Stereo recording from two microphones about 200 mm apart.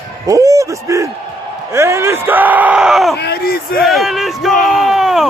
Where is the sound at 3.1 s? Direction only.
55° left (ahead or behind).